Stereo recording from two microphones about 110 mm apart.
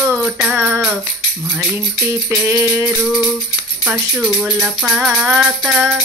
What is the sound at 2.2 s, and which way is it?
Music, 25° right (ahead or behind).